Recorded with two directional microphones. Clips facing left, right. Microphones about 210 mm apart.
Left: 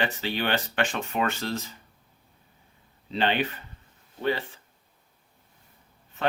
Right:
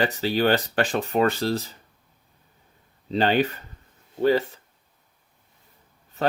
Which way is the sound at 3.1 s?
40° right (ahead or behind).